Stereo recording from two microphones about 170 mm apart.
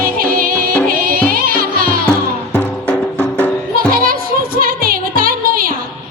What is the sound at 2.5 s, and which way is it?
Music, 5° left (ahead or behind).